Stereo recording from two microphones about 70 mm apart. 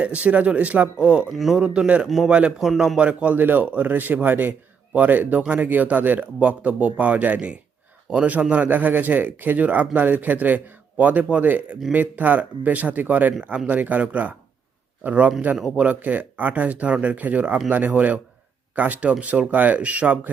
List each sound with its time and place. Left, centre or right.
0.0 s a man's voice: centre
1.3 s a man's voice: centre
1.5 s a man's voice: centre
2.0 s a man's voice: centre
3.0 s a man's voice: centre
15.5 s a man's voice: centre
15.8 s a man's voice: right